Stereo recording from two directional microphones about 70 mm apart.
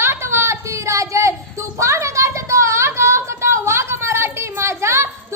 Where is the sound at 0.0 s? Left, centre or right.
Right.